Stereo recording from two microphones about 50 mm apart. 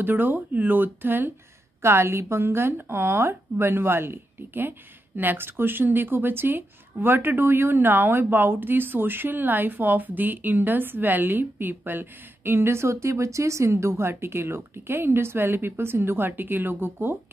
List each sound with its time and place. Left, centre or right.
0.0 s speech: right
1.8 s a woman's voice: right
2.4 s speech: right
13.7 s speech: right